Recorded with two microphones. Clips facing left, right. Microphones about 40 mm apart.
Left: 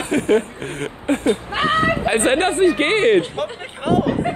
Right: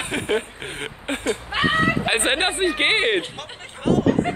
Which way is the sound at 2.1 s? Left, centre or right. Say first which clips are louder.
Left 5 dB; right.